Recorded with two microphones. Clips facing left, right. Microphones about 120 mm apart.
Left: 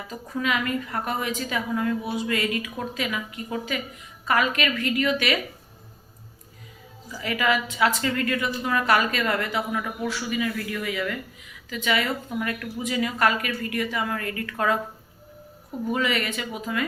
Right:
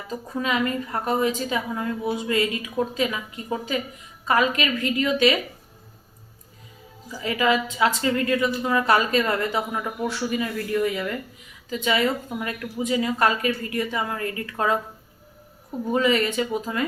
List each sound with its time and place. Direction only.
0.1 s a woman's voice: 30° right (ahead or behind)
7.2 s a woman's voice: 25° right (ahead or behind)
15.9 s speech: 30° right (ahead or behind)